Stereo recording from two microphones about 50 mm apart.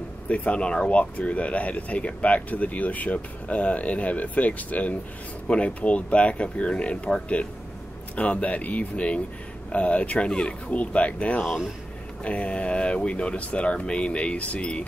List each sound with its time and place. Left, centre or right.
0.3 s speech: left